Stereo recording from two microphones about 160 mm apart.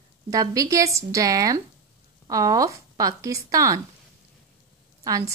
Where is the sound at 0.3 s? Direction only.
20° right (ahead or behind).